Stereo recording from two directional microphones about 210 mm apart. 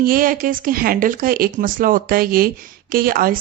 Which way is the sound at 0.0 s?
40° right (ahead or behind).